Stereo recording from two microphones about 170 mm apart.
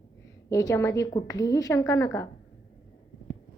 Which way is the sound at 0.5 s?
15° left (ahead or behind).